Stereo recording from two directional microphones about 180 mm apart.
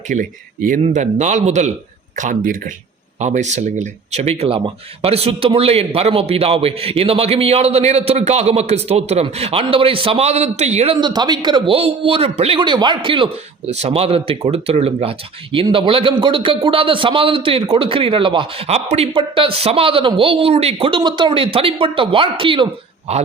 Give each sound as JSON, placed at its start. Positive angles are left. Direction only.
{"t": 0.1, "sound": "speech", "side_deg": -50}
{"t": 3.2, "sound": "speech", "side_deg": -40}
{"t": 10.9, "sound": "a man's voice", "side_deg": -25}